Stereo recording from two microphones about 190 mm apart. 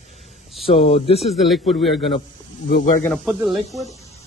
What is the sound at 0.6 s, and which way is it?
Speech, 30° left (ahead or behind).